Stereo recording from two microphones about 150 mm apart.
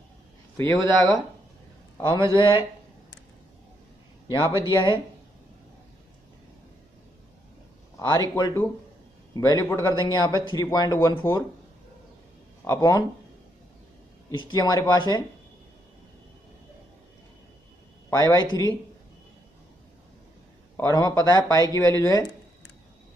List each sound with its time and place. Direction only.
0.9 s speech: centre (ahead or behind)
2.0 s a man's voice: 25° left (ahead or behind)
4.3 s a man's voice: 30° left (ahead or behind)
8.1 s a man's voice: 25° left (ahead or behind)
12.6 s a man's voice: 20° left (ahead or behind)
14.3 s a man's voice: 30° left (ahead or behind)
18.1 s a man's voice: 30° left (ahead or behind)
20.7 s a man's voice: 25° left (ahead or behind)